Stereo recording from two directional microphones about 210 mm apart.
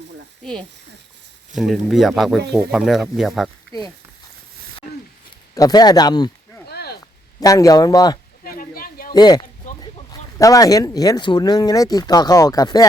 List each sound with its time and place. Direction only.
1.5 s speech: centre (ahead or behind)
5.5 s speech: 20° left (ahead or behind)
6.7 s a sound: 50° left (ahead or behind)
7.3 s speech: 15° left (ahead or behind)
8.4 s a sound: 45° left (ahead or behind)
9.1 s speech: 20° left (ahead or behind)